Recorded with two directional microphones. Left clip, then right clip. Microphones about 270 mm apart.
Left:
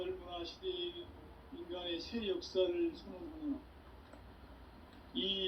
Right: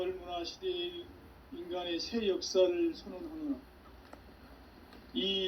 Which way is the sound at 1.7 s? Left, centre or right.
Right.